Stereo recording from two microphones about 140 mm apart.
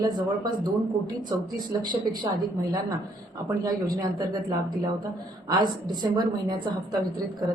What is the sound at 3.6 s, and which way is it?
Speech, 25° right (ahead or behind).